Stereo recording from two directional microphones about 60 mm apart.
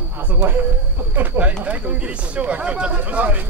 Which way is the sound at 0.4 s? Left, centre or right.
Right.